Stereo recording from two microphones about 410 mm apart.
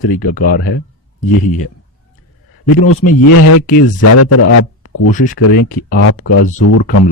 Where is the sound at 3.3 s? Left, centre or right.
Left.